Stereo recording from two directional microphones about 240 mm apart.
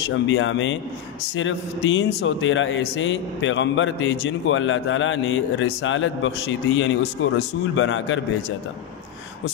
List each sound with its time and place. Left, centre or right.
0.1 s speech: left